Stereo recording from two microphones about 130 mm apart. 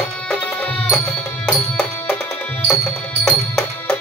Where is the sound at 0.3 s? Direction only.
10° left (ahead or behind).